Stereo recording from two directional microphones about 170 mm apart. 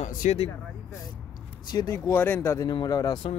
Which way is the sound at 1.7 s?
20° left (ahead or behind).